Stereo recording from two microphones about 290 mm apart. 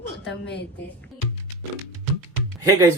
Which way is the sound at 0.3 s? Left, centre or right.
Left.